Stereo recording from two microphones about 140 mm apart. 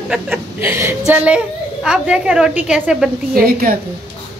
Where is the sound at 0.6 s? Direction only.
15° right (ahead or behind).